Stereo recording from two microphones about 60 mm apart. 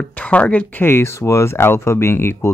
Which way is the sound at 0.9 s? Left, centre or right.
Left.